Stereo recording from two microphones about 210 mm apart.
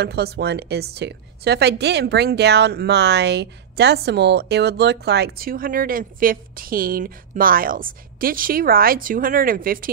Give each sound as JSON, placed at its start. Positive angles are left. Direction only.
{"t": 0.0, "sound": "a woman's voice", "side_deg": -50}